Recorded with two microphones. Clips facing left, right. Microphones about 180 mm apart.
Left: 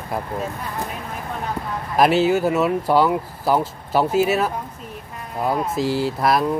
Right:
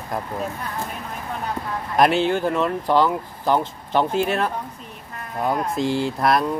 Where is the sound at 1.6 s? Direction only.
15° left (ahead or behind).